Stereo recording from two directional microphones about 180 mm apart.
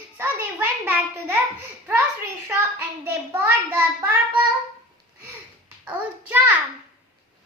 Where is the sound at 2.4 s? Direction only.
10° right (ahead or behind).